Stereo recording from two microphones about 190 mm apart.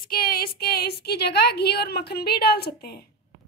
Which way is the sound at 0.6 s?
55° left (ahead or behind).